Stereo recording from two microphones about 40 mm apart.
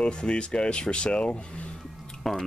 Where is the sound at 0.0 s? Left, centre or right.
Left.